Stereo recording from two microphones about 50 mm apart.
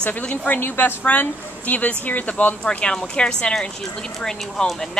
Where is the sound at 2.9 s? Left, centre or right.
Centre.